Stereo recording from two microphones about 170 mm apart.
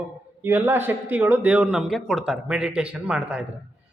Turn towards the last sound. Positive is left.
turn(degrees=-5)  # may be behind; listen again after turning